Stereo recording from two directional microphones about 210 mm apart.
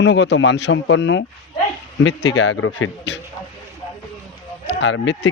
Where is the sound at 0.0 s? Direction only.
55° left (ahead or behind).